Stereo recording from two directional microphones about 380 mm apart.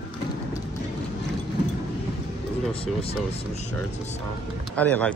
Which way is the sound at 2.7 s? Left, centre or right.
Centre.